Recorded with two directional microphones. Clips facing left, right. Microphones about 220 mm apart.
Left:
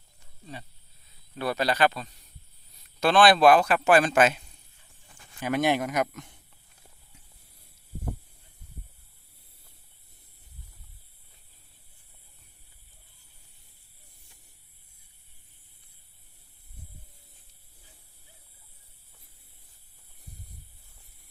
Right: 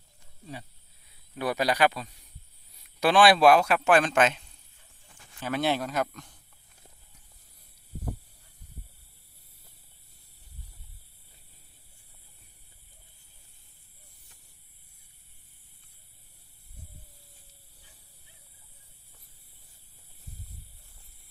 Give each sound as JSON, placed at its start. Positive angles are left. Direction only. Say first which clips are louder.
{"t": 1.4, "sound": "a man's voice", "louder": "even", "side_deg": -15}